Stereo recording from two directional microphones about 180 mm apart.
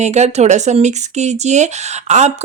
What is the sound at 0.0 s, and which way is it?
Speech, 40° right (ahead or behind).